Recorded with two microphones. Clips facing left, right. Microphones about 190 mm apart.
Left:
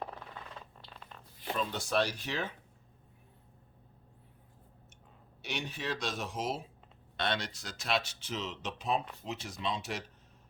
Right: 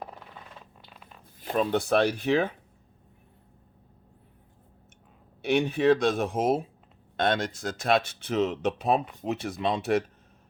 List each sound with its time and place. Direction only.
0.9 s zipper: 5° right (ahead or behind)
1.4 s speech: 55° right (ahead or behind)
5.4 s speech: 55° right (ahead or behind)